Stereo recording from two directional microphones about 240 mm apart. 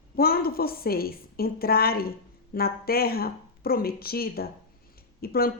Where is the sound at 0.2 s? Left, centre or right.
Left.